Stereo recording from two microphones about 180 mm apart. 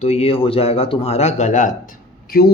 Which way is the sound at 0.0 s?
35° left (ahead or behind).